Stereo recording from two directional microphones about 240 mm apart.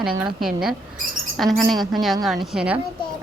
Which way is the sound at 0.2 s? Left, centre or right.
Centre.